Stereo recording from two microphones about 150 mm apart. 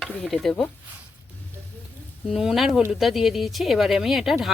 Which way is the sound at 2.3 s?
Centre (ahead or behind).